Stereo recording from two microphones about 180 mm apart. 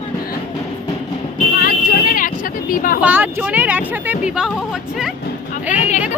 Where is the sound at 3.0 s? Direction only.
10° right (ahead or behind).